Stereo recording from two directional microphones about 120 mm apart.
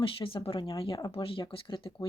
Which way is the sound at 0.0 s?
45° left (ahead or behind).